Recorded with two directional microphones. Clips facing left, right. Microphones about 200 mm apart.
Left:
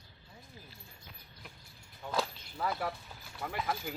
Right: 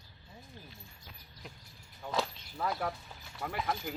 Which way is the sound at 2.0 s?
Centre (ahead or behind).